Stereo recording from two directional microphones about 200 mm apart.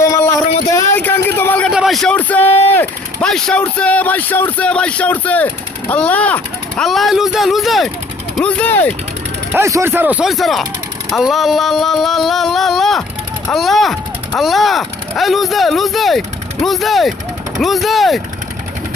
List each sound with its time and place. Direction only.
0.0 s a sound: 15° left (ahead or behind)
0.7 s speech: 15° left (ahead or behind)
9.5 s speech: 15° right (ahead or behind)